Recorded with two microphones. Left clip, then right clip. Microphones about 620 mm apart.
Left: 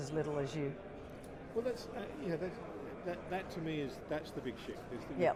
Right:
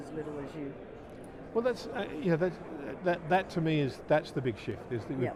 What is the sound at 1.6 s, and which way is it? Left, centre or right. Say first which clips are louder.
A man's voice: right 8 dB; right.